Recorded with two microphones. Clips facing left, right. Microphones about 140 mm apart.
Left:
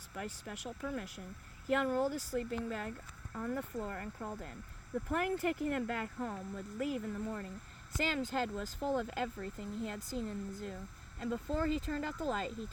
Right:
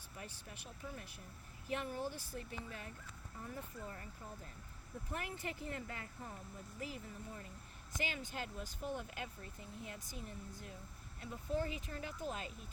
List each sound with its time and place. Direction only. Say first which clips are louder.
0.1 s speech: left 9 dB; 70° left (ahead or behind)
3.3 s speech: left 11 dB; 85° left
8.0 s speech: left 9 dB; 90° left